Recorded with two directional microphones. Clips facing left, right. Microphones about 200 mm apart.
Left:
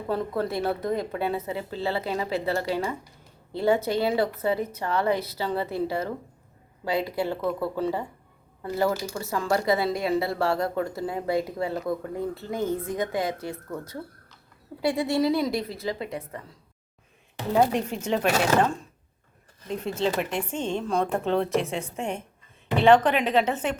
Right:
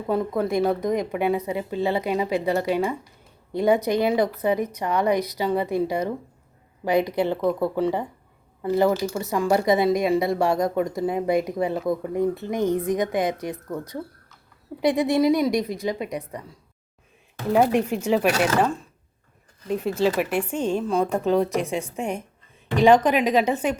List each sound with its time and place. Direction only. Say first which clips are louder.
0.1 s speech: right 4 dB; 15° right (ahead or behind)
14.8 s speech: right 4 dB; 20° right (ahead or behind)
17.5 s speech: right 3 dB; 10° right (ahead or behind)
19.8 s speech: right 4 dB; 10° right (ahead or behind)